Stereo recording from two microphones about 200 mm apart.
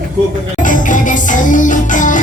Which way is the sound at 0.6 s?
40° left (ahead or behind).